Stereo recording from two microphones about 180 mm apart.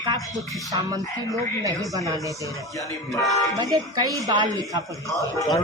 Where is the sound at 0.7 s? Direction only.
20° right (ahead or behind).